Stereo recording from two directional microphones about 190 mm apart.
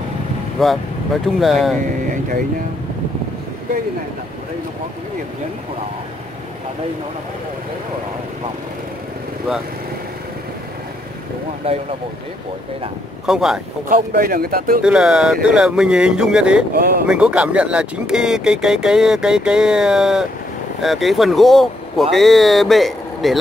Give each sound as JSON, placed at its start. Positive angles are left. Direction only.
{"t": 0.6, "sound": "speech", "side_deg": 0}
{"t": 13.3, "sound": "speech", "side_deg": 0}
{"t": 13.8, "sound": "speech", "side_deg": -50}
{"t": 14.8, "sound": "speech", "side_deg": -5}
{"t": 16.7, "sound": "speech", "side_deg": -50}
{"t": 17.1, "sound": "speech", "side_deg": -5}